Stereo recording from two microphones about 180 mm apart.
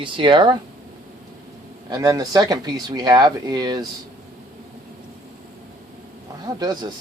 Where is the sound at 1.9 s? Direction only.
20° right (ahead or behind).